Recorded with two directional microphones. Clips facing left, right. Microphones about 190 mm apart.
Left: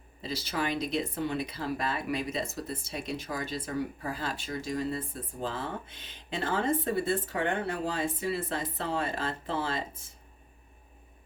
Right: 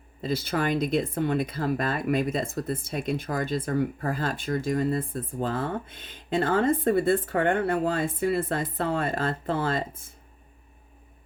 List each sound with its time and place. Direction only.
0.2 s speech: 55° right (ahead or behind)